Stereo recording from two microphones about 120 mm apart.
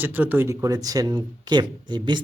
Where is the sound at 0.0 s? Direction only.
15° right (ahead or behind).